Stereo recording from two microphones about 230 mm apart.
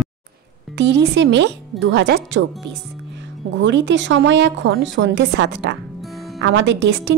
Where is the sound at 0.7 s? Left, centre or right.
Right.